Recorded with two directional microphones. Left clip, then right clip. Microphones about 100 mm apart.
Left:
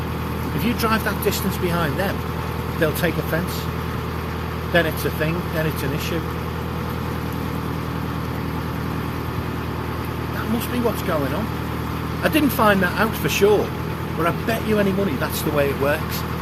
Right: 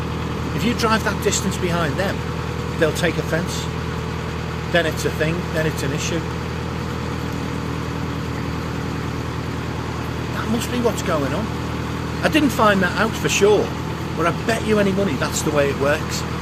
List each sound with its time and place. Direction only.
0.6 s speech: 25° right (ahead or behind)
4.7 s speech: 30° right (ahead or behind)
12.2 s speech: 30° right (ahead or behind)
14.3 s speech: 30° right (ahead or behind)